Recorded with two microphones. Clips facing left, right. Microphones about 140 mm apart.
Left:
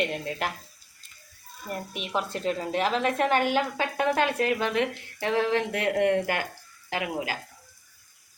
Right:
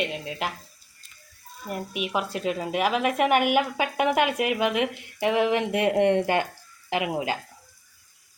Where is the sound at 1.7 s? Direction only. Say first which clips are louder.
Right 3 dB; 10° right (ahead or behind).